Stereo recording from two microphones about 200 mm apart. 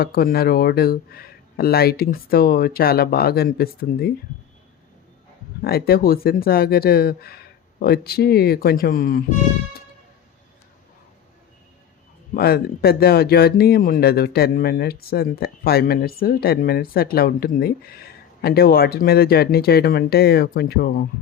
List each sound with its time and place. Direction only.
0.0 s speech: 50° left (ahead or behind)
5.6 s speech: 50° left (ahead or behind)
12.3 s speech: 50° left (ahead or behind)